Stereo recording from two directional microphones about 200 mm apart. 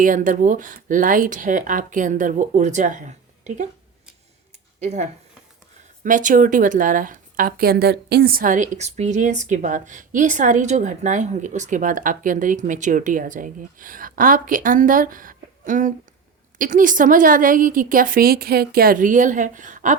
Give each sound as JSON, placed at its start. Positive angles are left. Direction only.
{"t": 0.0, "sound": "a woman's voice", "side_deg": -40}
{"t": 4.8, "sound": "a woman's voice", "side_deg": -35}